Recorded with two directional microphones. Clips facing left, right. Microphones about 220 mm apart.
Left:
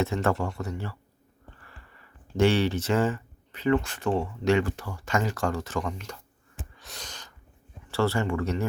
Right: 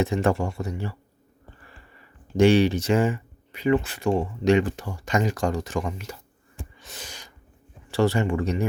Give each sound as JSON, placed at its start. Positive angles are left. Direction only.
{"t": 0.0, "sound": "speech", "side_deg": -15}
{"t": 2.3, "sound": "speech", "side_deg": -15}
{"t": 6.7, "sound": "a sound", "side_deg": 0}
{"t": 7.9, "sound": "speech", "side_deg": -15}